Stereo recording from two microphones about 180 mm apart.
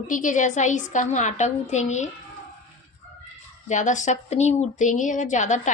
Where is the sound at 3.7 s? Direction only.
45° left (ahead or behind).